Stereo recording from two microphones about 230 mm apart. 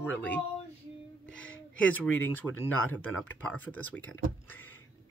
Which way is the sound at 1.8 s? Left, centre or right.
Left.